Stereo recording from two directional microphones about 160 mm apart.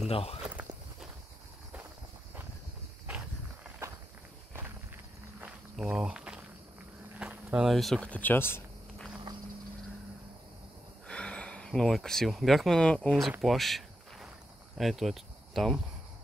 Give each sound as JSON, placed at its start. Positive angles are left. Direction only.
{"t": 0.1, "sound": "speech", "side_deg": 40}
{"t": 5.4, "sound": "walk", "side_deg": -5}
{"t": 7.2, "sound": "speech", "side_deg": -5}
{"t": 11.1, "sound": "speech", "side_deg": 5}
{"t": 13.4, "sound": "walk", "side_deg": 0}
{"t": 14.8, "sound": "speech", "side_deg": 0}